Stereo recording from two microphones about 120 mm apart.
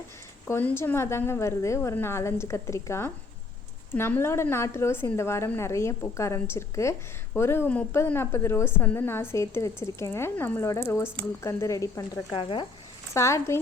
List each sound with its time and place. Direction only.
0.4 s a woman's voice: 20° left (ahead or behind)
12.4 s speech: 45° left (ahead or behind)
13.1 s a woman's voice: 25° left (ahead or behind)